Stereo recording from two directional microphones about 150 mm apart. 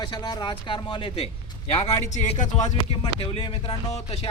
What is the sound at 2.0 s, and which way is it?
Speech, 50° left (ahead or behind).